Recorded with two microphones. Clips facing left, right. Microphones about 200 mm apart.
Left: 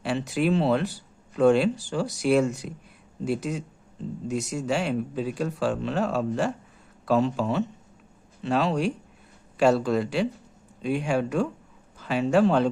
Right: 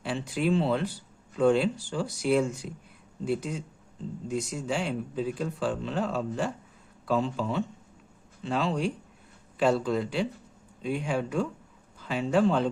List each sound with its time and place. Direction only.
0.0 s speech: 75° left (ahead or behind)